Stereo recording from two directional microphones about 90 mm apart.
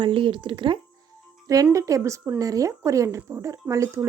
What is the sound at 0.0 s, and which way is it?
Speech, 75° right (ahead or behind).